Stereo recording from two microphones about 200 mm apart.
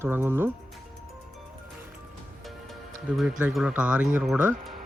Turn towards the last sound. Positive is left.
turn(degrees=-5)  # may be behind; listen again after turning